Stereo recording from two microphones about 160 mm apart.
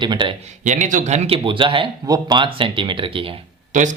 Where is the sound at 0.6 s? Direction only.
50° right (ahead or behind); by 3.4 s 35° right (ahead or behind).